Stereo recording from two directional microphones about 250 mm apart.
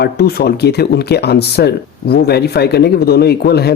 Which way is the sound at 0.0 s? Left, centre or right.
Left.